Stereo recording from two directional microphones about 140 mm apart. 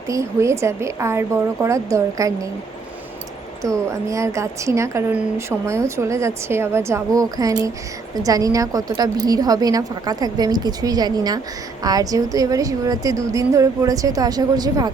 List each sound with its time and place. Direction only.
0.1 s a woman's voice: 20° right (ahead or behind)
3.6 s a woman's voice: 20° right (ahead or behind)